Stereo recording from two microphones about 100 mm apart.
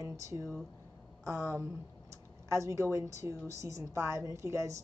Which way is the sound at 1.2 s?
30° right (ahead or behind).